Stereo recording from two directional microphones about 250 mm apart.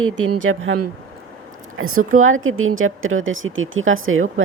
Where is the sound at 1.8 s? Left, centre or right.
Right.